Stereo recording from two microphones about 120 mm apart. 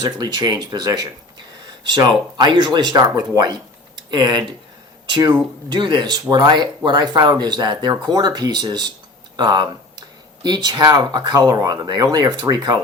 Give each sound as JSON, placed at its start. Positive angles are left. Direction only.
{"t": 0.0, "sound": "speech", "side_deg": -35}
{"t": 3.9, "sound": "a sound", "side_deg": -40}
{"t": 5.0, "sound": "speech", "side_deg": -40}